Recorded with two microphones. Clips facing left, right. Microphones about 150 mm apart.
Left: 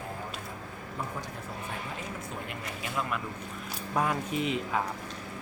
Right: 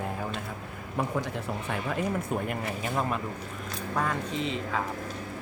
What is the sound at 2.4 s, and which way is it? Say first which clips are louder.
Speech: right 6 dB; 40° right (ahead or behind).